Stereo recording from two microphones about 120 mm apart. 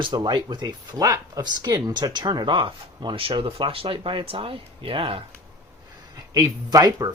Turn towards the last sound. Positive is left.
turn(degrees=-30)  # may be behind; listen again after turning